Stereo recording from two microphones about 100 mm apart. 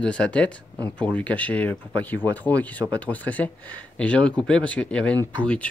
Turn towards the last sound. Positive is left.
turn(degrees=15)  # may be behind; listen again after turning